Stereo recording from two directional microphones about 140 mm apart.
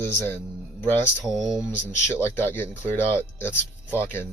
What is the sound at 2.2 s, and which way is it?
Speech, 15° left (ahead or behind).